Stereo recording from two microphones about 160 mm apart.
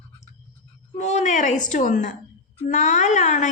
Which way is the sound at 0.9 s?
45° left (ahead or behind).